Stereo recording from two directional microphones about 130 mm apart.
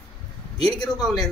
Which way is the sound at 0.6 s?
30° left (ahead or behind).